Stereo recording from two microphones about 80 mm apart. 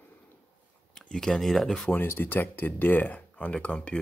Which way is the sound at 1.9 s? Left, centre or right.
Left.